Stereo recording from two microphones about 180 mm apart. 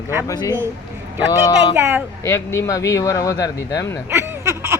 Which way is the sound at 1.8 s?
15° right (ahead or behind).